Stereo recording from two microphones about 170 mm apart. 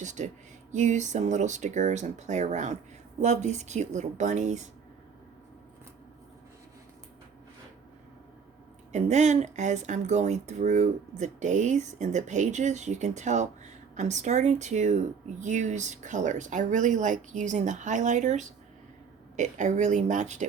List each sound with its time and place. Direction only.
0.0 s speech: 45° right (ahead or behind)
8.9 s speech: 45° right (ahead or behind)